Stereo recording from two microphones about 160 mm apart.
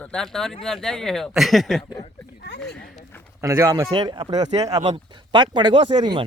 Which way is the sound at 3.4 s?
20° right (ahead or behind).